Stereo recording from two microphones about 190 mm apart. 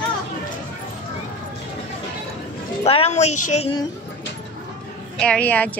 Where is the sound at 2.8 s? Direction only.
30° left (ahead or behind).